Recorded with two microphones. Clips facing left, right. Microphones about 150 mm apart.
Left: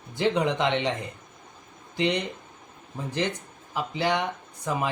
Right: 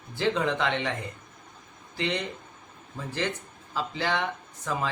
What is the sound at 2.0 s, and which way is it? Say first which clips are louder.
Speech: left 4 dB; 15° left (ahead or behind).